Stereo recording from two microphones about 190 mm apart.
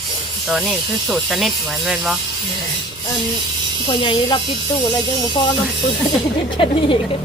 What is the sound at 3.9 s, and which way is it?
Speech, 25° left (ahead or behind).